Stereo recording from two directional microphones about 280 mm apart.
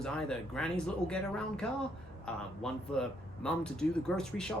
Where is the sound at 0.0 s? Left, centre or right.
Centre.